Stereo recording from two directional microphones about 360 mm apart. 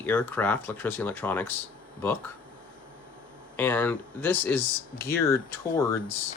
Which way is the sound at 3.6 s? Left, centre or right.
Centre.